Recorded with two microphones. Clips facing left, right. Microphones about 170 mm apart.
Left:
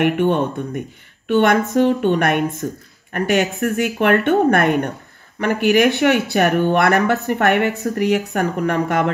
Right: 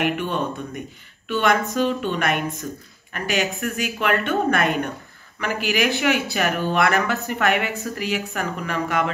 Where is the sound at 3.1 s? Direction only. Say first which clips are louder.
Left 6 dB; 55° left (ahead or behind).